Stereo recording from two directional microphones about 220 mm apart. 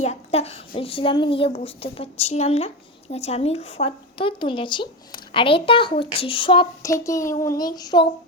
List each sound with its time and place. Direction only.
0.0 s a woman's voice: 30° left (ahead or behind)